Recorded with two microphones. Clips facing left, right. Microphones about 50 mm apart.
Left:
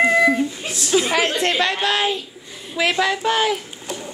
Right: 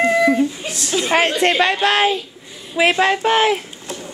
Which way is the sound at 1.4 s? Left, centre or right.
Right.